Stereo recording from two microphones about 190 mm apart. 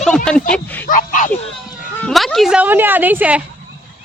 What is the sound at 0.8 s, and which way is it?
Speech, 45° left (ahead or behind).